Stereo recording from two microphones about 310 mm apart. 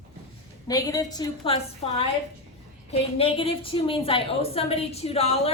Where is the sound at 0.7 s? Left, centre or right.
Centre.